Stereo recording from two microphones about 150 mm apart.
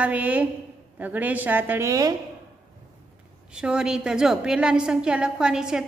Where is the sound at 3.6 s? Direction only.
5° right (ahead or behind).